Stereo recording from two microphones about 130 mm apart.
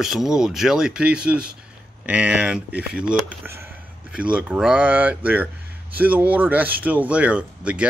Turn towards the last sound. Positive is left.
turn(degrees=-10)  # may be behind; listen again after turning